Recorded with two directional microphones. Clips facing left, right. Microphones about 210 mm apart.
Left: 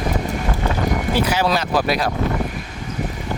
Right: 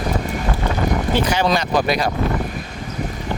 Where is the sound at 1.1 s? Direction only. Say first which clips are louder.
Right 1 dB; 5° left (ahead or behind).